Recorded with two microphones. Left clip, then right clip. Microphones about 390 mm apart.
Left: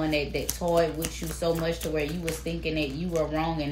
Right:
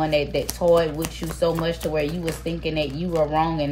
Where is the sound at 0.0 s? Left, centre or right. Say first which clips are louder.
Right 6 dB; right.